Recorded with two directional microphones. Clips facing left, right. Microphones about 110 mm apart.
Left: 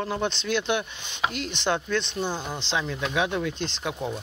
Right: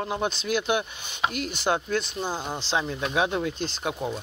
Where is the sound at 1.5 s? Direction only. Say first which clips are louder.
Even; 10° right (ahead or behind).